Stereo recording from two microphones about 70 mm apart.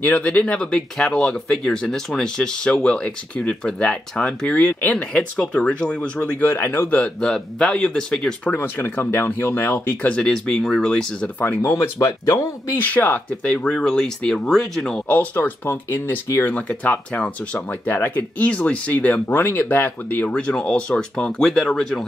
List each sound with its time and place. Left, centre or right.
0.0 s speech: centre
6.4 s speech: left
7.0 s speech: centre
8.5 s speech: left
10.0 s speech: centre
11.4 s speech: left
12.7 s speech: left; by 15.0 s centre
15.0 s speech: left
18.4 s speech: centre
19.2 s speech: left
20.2 s speech: centre
21.5 s speech: centre